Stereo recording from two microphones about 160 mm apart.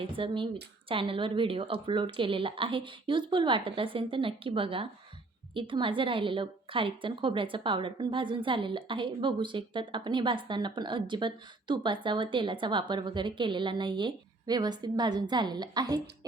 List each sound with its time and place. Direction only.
0.0 s a woman's voice: 35° right (ahead or behind)